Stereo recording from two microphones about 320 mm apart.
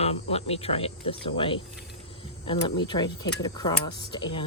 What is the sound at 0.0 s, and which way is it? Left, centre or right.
Speech, centre.